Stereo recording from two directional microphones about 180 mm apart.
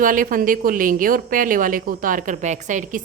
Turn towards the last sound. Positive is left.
turn(degrees=-45)  # may be behind; listen again after turning